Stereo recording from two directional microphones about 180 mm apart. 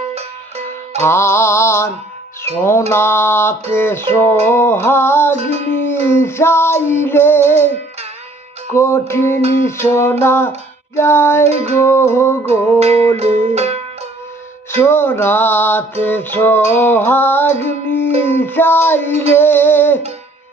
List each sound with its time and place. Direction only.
0.2 s music: 35° right (ahead or behind)
1.0 s music: 15° left (ahead or behind)
5.4 s music: 40° right (ahead or behind)
5.7 s music: 10° left (ahead or behind)
8.7 s music: 15° left (ahead or behind)
11.4 s music: 35° right (ahead or behind)
11.8 s music: 15° left (ahead or behind)
13.1 s music: 40° right (ahead or behind)
14.7 s music: 10° left (ahead or behind)